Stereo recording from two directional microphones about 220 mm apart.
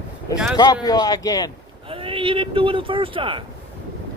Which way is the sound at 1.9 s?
25° right (ahead or behind).